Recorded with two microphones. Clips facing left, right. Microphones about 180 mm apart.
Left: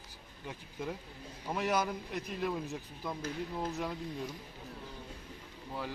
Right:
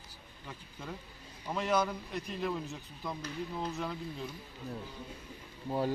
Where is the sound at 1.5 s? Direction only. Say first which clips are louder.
Right 1 dB; 10° left (ahead or behind).